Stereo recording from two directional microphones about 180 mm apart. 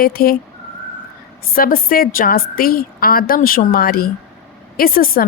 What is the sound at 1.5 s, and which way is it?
A woman's voice, 55° left (ahead or behind).